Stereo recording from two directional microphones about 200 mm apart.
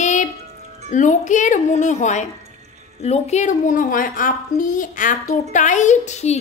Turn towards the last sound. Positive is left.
turn(degrees=35)  # may be behind; listen again after turning